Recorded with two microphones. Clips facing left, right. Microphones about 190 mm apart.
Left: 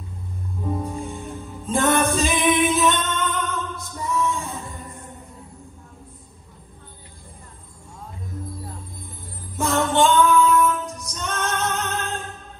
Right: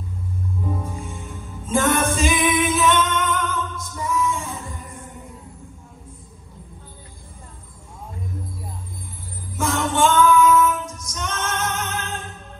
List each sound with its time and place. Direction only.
0.8 s music: 35° left (ahead or behind)
9.6 s female singing: 35° left (ahead or behind)